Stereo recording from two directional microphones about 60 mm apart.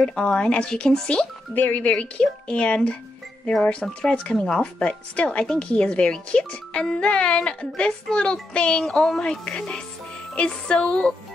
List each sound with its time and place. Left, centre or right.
0.0 s a woman's voice: centre
1.5 s speech: left
4.1 s a woman's voice: centre